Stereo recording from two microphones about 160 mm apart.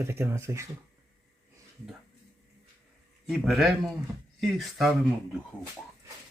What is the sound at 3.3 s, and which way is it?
Speech, centre (ahead or behind).